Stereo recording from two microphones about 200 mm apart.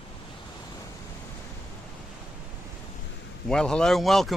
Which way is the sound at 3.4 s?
5° left (ahead or behind).